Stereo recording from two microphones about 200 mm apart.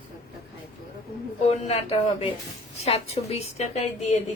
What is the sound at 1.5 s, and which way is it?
A woman's voice, 30° left (ahead or behind).